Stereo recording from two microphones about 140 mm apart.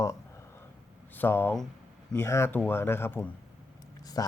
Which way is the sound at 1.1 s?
15° left (ahead or behind).